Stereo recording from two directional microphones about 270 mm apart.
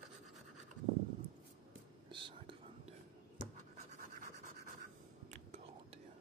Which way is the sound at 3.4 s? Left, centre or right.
Right.